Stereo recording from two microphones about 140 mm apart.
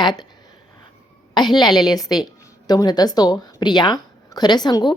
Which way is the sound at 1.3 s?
30° left (ahead or behind).